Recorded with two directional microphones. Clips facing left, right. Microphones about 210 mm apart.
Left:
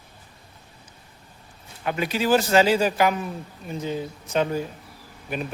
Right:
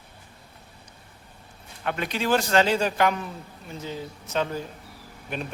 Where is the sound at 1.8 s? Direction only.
5° left (ahead or behind).